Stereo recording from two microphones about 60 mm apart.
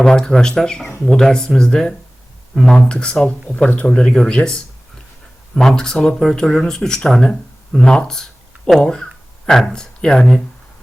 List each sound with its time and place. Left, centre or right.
0.0 s speech: centre